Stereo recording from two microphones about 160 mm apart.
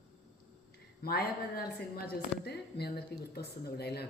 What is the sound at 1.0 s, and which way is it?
Speech, 75° left (ahead or behind).